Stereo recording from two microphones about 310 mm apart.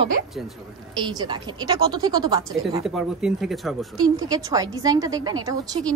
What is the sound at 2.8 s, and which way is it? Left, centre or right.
Speech, centre.